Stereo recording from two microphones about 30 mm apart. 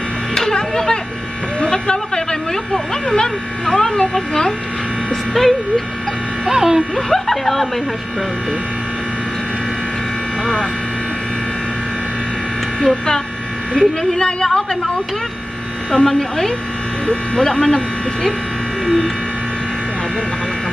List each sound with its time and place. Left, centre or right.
0.6 s tick-tock: left
1.6 s a sound: left
2.5 s speech: left
5.1 s speech: centre
6.4 s speech: centre
7.1 s a sound: centre
12.8 s speech: left
16.1 s speech: centre
17.0 s speech: left
17.5 s speech: left